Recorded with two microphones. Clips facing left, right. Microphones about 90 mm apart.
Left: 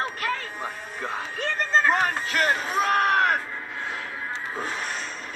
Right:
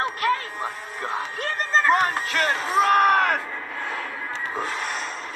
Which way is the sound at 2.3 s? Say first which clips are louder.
Left 2 dB; 5° left (ahead or behind).